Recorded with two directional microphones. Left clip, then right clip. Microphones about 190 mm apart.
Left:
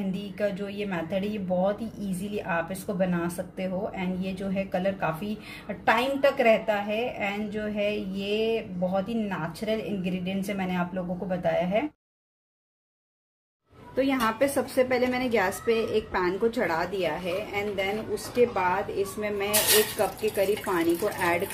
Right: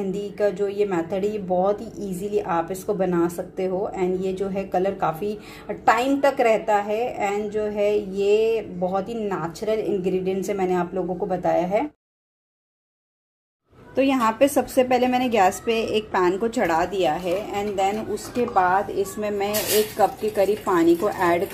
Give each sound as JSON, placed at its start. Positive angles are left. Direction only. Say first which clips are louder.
{"t": 0.1, "sound": "speech", "louder": "right 6 dB", "side_deg": -20}
{"t": 13.9, "sound": "speech", "louder": "right 5 dB", "side_deg": -20}